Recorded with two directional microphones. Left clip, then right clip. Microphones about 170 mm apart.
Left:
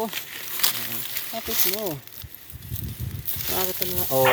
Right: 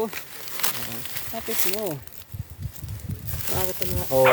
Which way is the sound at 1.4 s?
5° left (ahead or behind).